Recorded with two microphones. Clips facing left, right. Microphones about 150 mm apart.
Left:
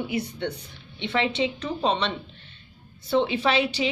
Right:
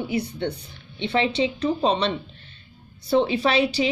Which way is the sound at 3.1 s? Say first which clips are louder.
Right 2 dB; 35° right (ahead or behind).